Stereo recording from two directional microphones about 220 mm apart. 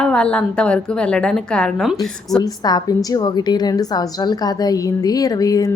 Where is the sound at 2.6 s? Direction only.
20° left (ahead or behind).